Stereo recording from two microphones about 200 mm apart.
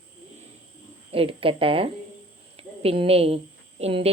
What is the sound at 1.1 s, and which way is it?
Speech, 30° right (ahead or behind).